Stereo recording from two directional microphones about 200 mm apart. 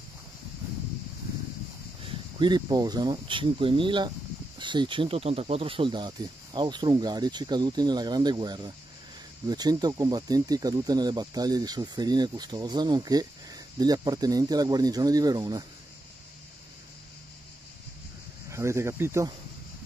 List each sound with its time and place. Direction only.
2.0 s speech: 25° right (ahead or behind)
18.5 s speech: 15° right (ahead or behind)